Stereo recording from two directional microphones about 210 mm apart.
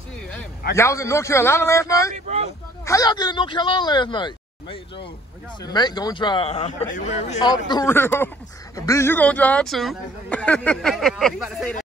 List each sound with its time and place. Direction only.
0.7 s a man's voice: 15° left (ahead or behind)
2.1 s speech: 30° right (ahead or behind)
2.8 s a man's voice: 15° left (ahead or behind); by 11.7 s centre (ahead or behind)